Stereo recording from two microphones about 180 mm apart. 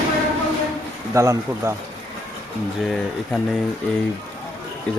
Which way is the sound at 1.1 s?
15° right (ahead or behind).